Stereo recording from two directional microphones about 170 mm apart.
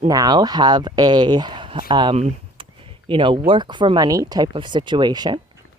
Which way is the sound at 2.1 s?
40° right (ahead or behind).